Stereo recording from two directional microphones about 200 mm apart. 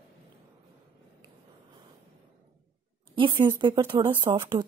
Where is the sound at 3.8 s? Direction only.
20° right (ahead or behind).